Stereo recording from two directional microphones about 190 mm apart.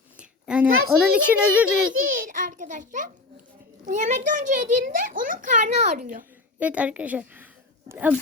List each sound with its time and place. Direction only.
0.2 s a sound: 5° right (ahead or behind)
0.9 s a child's voice: 5° right (ahead or behind)
2.0 s a child's voice: 45° right (ahead or behind)
6.6 s a child's voice: 5° right (ahead or behind)